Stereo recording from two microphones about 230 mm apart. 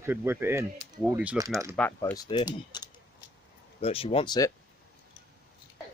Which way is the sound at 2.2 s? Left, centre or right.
Centre.